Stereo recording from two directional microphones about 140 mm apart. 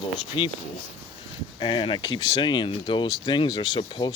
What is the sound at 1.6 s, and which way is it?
Speech, 35° left (ahead or behind).